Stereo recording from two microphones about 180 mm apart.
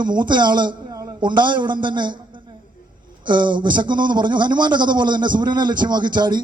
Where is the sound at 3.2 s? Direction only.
25° right (ahead or behind).